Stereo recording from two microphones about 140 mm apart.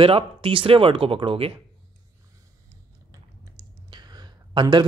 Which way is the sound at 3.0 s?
30° right (ahead or behind).